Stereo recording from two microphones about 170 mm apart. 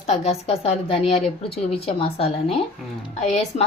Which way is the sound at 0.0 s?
40° left (ahead or behind).